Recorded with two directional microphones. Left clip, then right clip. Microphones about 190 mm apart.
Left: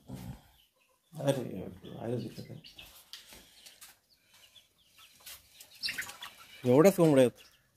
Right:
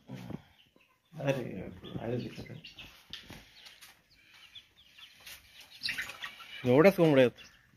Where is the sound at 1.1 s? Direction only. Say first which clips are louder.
Left 1 dB; 15° left (ahead or behind).